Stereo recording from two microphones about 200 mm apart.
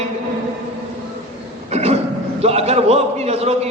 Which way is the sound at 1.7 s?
30° right (ahead or behind).